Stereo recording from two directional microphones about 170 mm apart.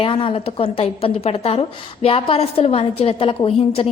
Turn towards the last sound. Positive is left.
turn(degrees=35)  # may be behind; listen again after turning